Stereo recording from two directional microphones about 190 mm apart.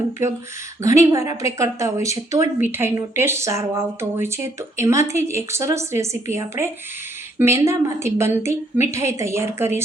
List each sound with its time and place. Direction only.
0.2 s speech: 15° right (ahead or behind)